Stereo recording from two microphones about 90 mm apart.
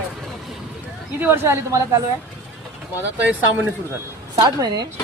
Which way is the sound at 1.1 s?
25° right (ahead or behind).